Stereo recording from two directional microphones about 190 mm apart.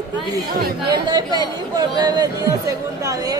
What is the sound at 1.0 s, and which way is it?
Speech, 20° right (ahead or behind).